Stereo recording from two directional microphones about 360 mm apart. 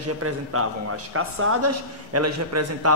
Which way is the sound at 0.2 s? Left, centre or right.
Right.